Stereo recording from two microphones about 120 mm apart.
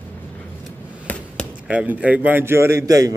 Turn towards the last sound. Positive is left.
turn(degrees=-30)  # may be behind; listen again after turning